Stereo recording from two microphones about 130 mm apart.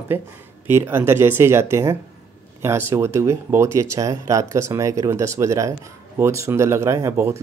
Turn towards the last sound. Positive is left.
turn(degrees=-20)  # may be behind; listen again after turning